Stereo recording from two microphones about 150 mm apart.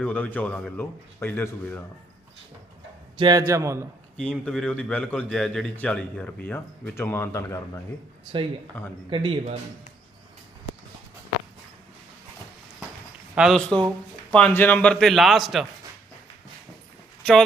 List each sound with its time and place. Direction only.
0.0 s a man's voice: 10° left (ahead or behind)
3.2 s a man's voice: 30° right (ahead or behind)
4.2 s a man's voice: 5° left (ahead or behind)
9.0 s speech: 35° right (ahead or behind)
13.3 s speech: 5° right (ahead or behind)
14.3 s a man's voice: 10° left (ahead or behind)
17.2 s speech: 5° left (ahead or behind)